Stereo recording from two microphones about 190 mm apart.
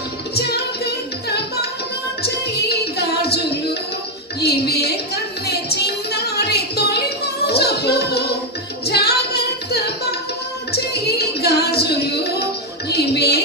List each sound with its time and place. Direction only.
0.4 s music: 60° left (ahead or behind)
4.4 s music: 55° left (ahead or behind)